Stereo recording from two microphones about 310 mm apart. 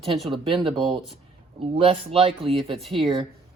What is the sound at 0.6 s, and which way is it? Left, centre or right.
A woman's voice, centre.